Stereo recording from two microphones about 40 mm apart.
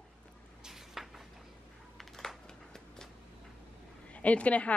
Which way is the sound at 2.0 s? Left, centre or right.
Centre.